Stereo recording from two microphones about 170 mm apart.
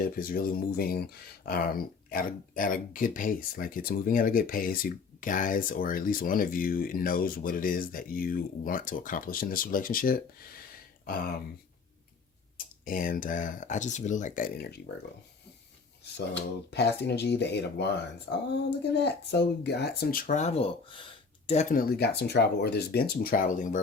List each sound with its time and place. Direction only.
0.0 s speech: 60° left (ahead or behind)
11.0 s a sound: 60° left (ahead or behind)
12.5 s speech: 55° left (ahead or behind)
16.7 s speech: 80° left; by 21.8 s 40° left (ahead or behind)
21.8 s speech: 65° left (ahead or behind); by 23.8 s 50° left (ahead or behind)